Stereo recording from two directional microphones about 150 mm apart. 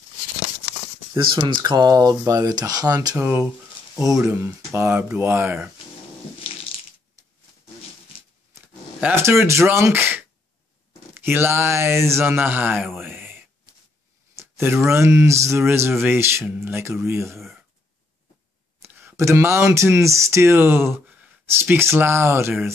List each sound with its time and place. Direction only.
1.3 s speech: 30° right (ahead or behind); by 5.6 s 15° right (ahead or behind)
6.4 s a sound: 40° left (ahead or behind)
9.0 s speech: 15° right (ahead or behind)
13.0 s a sound: 15° right (ahead or behind)
14.3 s speech: 15° right (ahead or behind)
18.8 s speech: 15° right (ahead or behind)